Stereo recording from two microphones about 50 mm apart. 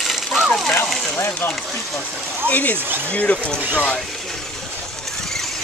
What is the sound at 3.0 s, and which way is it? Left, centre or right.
Speech, left.